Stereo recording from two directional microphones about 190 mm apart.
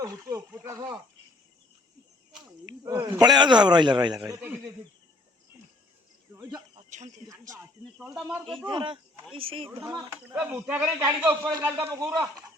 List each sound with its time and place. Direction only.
0.0 s a man's voice: 15° right (ahead or behind)
2.8 s a man's voice: 25° right (ahead or behind)
4.4 s a man's voice: 10° right (ahead or behind)
6.3 s cricket: 20° right (ahead or behind)
8.0 s speech: 5° right (ahead or behind)
8.6 s a man's voice: 25° right (ahead or behind)
10.3 s a man's voice: 10° right (ahead or behind)